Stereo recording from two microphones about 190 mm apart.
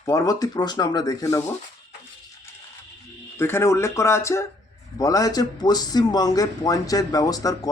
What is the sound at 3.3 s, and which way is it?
A man's voice, 15° left (ahead or behind).